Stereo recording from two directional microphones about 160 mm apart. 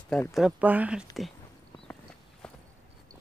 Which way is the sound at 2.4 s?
5° left (ahead or behind).